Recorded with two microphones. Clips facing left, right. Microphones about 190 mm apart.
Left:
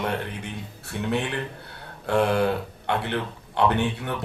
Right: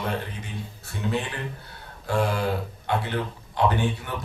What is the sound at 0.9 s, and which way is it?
Speech, 65° left (ahead or behind).